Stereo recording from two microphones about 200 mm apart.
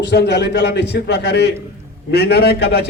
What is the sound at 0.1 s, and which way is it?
A man's voice, 55° left (ahead or behind).